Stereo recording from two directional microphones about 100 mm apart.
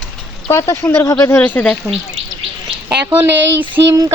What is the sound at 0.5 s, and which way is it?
Speech, 30° left (ahead or behind).